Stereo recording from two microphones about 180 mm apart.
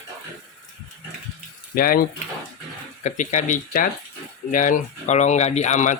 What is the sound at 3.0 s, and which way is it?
Speech, 40° left (ahead or behind).